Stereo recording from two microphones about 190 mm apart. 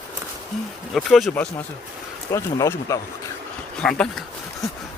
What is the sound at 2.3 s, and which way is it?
Speech, 15° left (ahead or behind).